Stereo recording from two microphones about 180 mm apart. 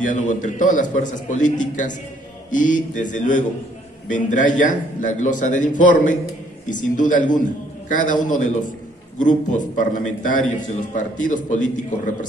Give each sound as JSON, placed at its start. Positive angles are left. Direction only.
{"t": 0.0, "sound": "a man's voice", "side_deg": 45}